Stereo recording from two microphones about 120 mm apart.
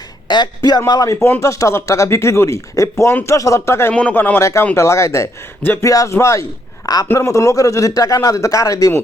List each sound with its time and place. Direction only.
0.3 s a man's voice: 35° left (ahead or behind)